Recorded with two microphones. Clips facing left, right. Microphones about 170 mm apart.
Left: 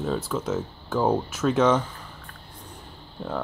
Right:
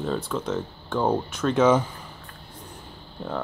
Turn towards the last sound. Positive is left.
turn(degrees=0)  # may be behind; listen again after turning